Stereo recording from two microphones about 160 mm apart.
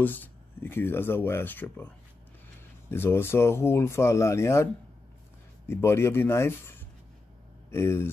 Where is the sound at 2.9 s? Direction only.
15° left (ahead or behind).